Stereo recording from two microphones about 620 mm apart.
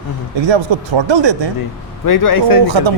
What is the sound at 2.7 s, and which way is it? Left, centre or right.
Speech, right.